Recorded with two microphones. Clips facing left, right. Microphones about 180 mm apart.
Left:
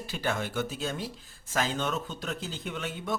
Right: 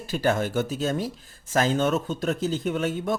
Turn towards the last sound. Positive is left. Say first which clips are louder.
# right 9 dB
turn(degrees=-45)  # may be behind; listen again after turning